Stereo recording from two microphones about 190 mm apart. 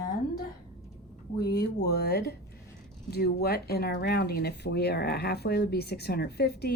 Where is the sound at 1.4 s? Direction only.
60° left (ahead or behind).